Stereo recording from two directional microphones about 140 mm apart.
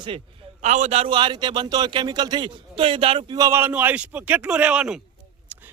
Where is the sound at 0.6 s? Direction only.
60° right (ahead or behind); by 3.4 s 40° right (ahead or behind).